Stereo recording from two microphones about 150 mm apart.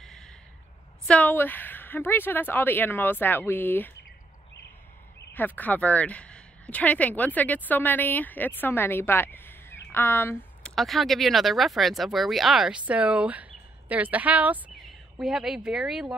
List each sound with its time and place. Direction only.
0.0 s a sound: centre (ahead or behind)
1.0 s speech: 10° left (ahead or behind)
5.3 s speech: 10° left (ahead or behind)
10.6 s speech: centre (ahead or behind)